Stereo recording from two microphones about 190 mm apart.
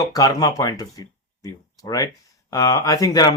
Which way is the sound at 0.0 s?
20° left (ahead or behind).